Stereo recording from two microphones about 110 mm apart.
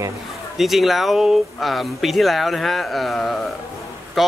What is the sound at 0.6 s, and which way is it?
Speech, centre (ahead or behind).